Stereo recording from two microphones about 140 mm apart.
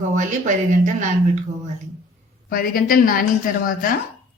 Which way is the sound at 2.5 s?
90° left.